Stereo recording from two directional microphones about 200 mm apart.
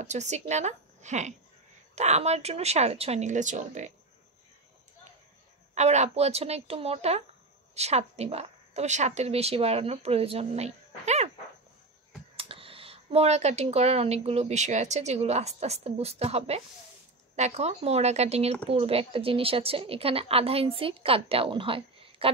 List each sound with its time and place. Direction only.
0.0 s speech: 35° right (ahead or behind)
5.8 s speech: 35° right (ahead or behind)
12.4 s speech: 25° right (ahead or behind)